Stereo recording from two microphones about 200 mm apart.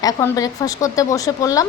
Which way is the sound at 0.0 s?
20° left (ahead or behind).